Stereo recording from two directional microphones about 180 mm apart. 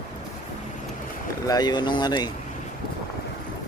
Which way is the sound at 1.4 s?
20° left (ahead or behind).